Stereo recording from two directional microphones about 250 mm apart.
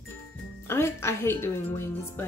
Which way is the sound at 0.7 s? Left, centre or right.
Centre.